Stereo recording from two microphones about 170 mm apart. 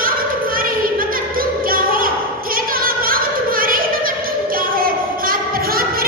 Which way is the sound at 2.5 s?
60° right (ahead or behind).